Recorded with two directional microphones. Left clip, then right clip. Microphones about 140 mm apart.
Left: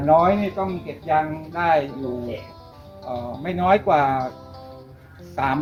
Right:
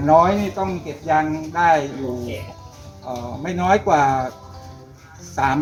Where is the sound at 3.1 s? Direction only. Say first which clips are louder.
Right 1 dB; 20° left (ahead or behind).